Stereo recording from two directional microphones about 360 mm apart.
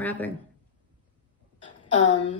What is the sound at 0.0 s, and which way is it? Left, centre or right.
Speech, centre.